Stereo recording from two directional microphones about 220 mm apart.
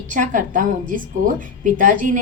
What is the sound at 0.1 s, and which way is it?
A woman's voice, 35° right (ahead or behind).